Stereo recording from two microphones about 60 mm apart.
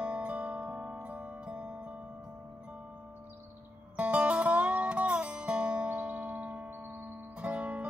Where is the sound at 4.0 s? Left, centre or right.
Right.